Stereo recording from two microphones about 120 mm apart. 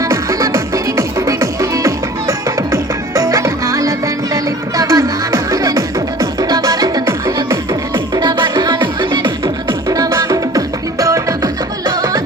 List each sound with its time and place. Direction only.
0.1 s music: 25° right (ahead or behind)
9.9 s music: 30° right (ahead or behind)